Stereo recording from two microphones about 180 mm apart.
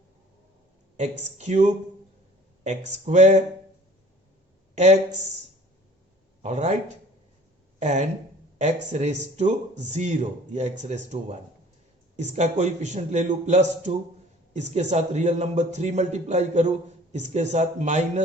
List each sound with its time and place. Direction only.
0.9 s a man's voice: 40° right (ahead or behind)
4.7 s a man's voice: 40° right (ahead or behind)
6.4 s a man's voice: 40° right (ahead or behind)